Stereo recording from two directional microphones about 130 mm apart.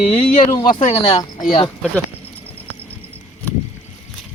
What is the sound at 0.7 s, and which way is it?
Speech, 45° left (ahead or behind).